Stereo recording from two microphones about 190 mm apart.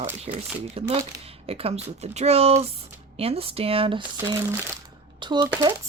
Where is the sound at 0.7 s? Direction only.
30° right (ahead or behind).